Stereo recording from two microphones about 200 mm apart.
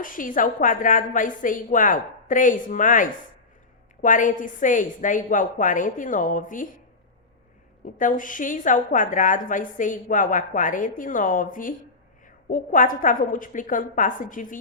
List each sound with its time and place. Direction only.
0.0 s a woman's voice: 40° left (ahead or behind)
7.9 s a woman's voice: 40° left (ahead or behind)